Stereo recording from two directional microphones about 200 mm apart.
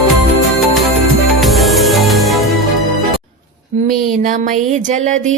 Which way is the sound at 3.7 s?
35° right (ahead or behind).